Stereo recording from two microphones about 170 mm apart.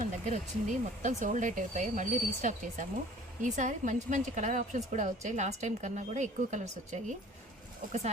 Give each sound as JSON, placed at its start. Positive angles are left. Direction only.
{"t": 0.3, "sound": "a woman's voice", "side_deg": -45}